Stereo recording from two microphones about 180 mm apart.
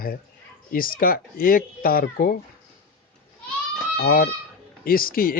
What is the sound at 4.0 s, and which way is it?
Speech, 65° left (ahead or behind).